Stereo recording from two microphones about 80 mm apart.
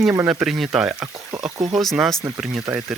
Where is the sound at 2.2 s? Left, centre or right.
Right.